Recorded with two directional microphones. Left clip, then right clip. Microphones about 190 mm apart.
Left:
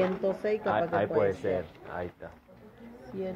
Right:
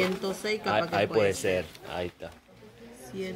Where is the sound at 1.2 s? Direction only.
85° right.